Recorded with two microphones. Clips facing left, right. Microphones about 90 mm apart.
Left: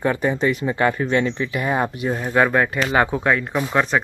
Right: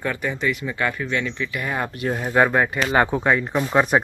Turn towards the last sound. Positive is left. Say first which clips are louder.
# right 1 dB
turn(degrees=-10)  # may be behind; listen again after turning